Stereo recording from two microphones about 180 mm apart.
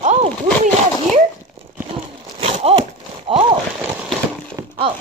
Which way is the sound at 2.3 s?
35° right (ahead or behind).